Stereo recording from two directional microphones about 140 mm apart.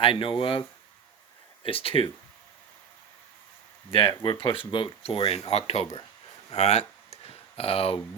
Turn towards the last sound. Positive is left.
turn(degrees=45)  # may be behind; listen again after turning